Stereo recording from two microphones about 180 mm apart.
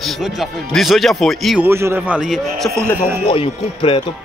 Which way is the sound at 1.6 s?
15° right (ahead or behind).